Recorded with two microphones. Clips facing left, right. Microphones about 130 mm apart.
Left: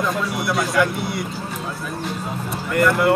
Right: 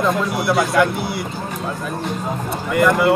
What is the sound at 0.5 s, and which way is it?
Speech, 55° right (ahead or behind).